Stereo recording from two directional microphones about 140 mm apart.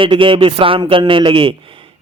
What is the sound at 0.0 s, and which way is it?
A man's voice, 35° right (ahead or behind).